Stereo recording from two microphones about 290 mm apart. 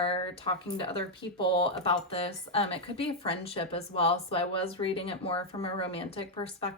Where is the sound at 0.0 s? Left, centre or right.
Centre.